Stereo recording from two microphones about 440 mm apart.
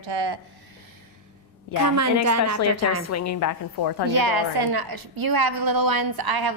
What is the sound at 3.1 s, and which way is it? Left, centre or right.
A woman's voice, left.